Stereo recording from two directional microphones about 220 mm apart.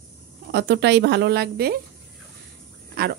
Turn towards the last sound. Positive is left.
turn(degrees=-45)  # may be behind; listen again after turning